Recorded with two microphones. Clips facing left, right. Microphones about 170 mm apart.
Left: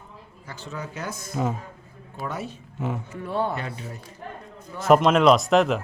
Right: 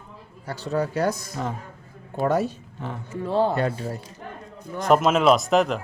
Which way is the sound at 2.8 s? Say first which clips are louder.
Left 4 dB; 5° left (ahead or behind).